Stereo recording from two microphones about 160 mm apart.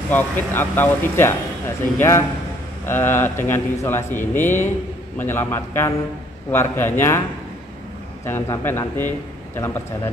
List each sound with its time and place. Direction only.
0.1 s a man's voice: 15° left (ahead or behind)
8.3 s a man's voice: 15° left (ahead or behind)